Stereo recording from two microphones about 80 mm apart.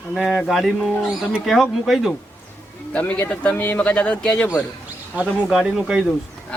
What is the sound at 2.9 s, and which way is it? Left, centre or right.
Speech, centre.